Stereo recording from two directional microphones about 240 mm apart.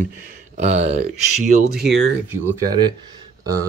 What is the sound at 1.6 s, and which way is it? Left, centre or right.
Speech, right.